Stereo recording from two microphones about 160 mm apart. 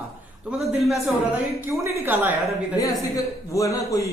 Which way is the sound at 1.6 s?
15° right (ahead or behind).